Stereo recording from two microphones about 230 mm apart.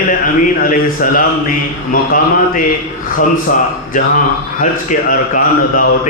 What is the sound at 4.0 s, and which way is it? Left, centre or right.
A man's voice, left.